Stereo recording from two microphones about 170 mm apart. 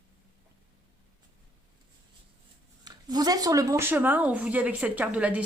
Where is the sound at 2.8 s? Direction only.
25° right (ahead or behind).